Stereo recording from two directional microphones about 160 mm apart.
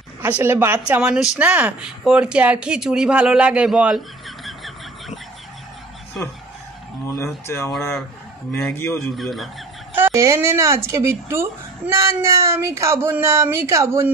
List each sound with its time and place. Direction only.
0.2 s speech: 15° right (ahead or behind)
4.5 s a sound: centre (ahead or behind)
7.1 s speech: 15° left (ahead or behind)
9.1 s speech: centre (ahead or behind)
9.9 s speech: 15° right (ahead or behind)